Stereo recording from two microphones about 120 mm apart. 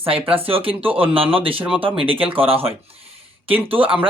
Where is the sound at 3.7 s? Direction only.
50° right (ahead or behind).